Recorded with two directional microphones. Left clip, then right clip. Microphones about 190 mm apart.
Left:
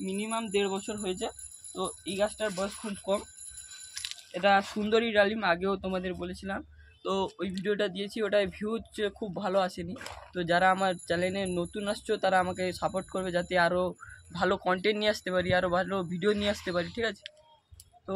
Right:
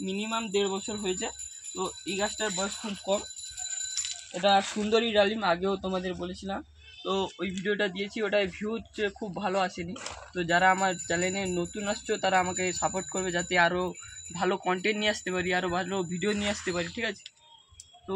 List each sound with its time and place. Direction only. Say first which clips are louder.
0.1 s speech: right 2 dB; centre (ahead or behind)
0.4 s speech: right 1 dB; 25° right (ahead or behind)
1.8 s speech: left 1 dB; 30° left (ahead or behind)
3.9 s bicycle bell: right 3 dB; 10° right (ahead or behind)
4.6 s speech: right 2 dB; centre (ahead or behind)
4.8 s speech: right 1 dB; 25° right (ahead or behind)
7.0 s speech: right 1 dB; 20° left (ahead or behind)